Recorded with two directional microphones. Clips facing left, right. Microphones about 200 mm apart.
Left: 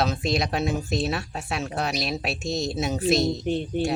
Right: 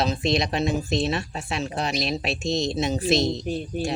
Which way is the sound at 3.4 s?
25° left (ahead or behind).